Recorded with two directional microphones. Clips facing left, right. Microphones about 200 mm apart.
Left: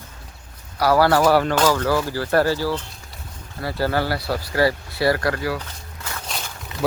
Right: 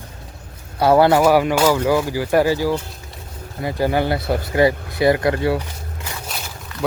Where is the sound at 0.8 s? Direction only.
25° right (ahead or behind).